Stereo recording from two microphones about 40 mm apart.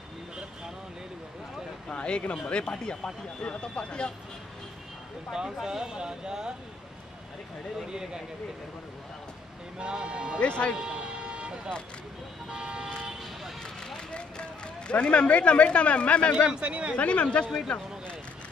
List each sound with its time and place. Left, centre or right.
1.9 s a sound: left
2.4 s speech: left
5.3 s speech: centre
7.9 s speech: centre
9.8 s speech: right
10.4 s speech: left
10.8 s vehicle: right
12.4 s speech: right
13.6 s vehicle: centre
14.9 s speech: left
16.6 s speech: right
16.9 s speech: left